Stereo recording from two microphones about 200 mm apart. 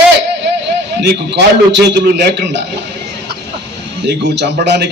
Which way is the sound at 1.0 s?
60° right (ahead or behind).